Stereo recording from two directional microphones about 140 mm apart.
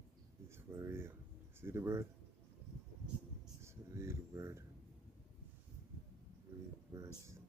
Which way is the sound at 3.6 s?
20° right (ahead or behind).